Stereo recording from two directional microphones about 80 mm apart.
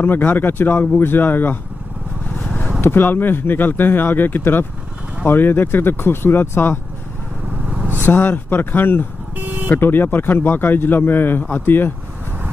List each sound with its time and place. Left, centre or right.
0.0 s speech: left
2.8 s speech: left
7.7 s vehicle: centre
8.0 s speech: left
9.4 s vehicle: right
9.7 s speech: left